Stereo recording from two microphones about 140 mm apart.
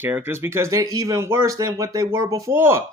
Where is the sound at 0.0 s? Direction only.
15° right (ahead or behind).